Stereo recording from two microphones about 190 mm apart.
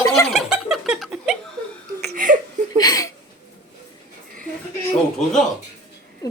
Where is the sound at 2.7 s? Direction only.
20° left (ahead or behind).